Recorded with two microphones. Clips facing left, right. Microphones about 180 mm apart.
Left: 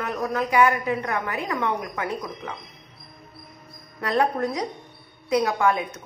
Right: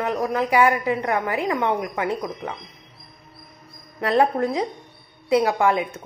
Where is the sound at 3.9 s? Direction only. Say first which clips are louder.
Right 4 dB; 25° right (ahead or behind).